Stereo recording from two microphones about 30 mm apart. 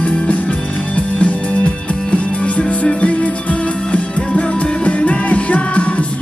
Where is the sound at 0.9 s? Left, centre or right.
Left.